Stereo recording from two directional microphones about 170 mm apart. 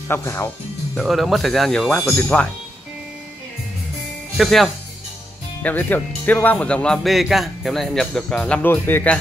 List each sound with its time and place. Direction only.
0.1 s speech: 15° left (ahead or behind)
0.9 s speech: centre (ahead or behind)
4.4 s speech: centre (ahead or behind)